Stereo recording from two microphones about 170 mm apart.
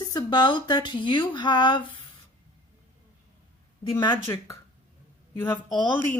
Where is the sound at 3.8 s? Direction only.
30° left (ahead or behind).